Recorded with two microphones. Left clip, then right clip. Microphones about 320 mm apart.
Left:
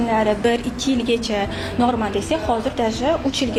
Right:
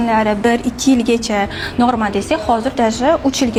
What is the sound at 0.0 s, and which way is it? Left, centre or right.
A woman's voice, right.